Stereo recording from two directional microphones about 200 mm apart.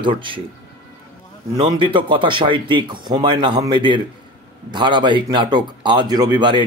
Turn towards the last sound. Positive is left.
turn(degrees=-20)  # may be behind; listen again after turning